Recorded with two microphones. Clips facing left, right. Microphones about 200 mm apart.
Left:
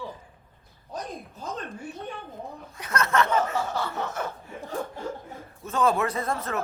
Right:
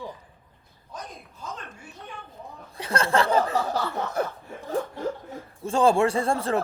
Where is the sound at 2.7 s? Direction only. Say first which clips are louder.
Right 2 dB; 30° right (ahead or behind).